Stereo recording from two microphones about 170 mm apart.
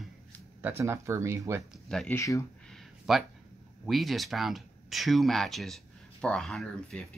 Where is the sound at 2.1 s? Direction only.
20° left (ahead or behind).